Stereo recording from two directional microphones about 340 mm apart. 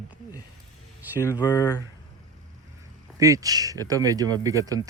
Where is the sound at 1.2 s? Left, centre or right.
Centre.